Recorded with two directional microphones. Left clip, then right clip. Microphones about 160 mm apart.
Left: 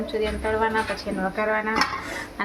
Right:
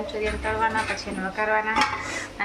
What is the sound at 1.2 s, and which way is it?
Speech, 70° left (ahead or behind).